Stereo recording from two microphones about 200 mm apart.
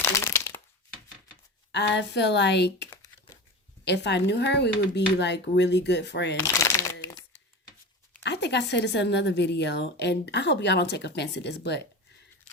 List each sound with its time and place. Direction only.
0.0 s crack: 10° left (ahead or behind)
1.7 s a woman's voice: 60° left (ahead or behind)
2.9 s crumpling: 15° left (ahead or behind)
3.8 s a woman's voice: 60° left (ahead or behind)
6.4 s crumpling: 15° left (ahead or behind)
8.2 s a woman's voice: 60° left (ahead or behind)